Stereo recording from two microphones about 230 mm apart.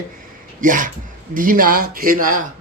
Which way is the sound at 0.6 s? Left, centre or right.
Right.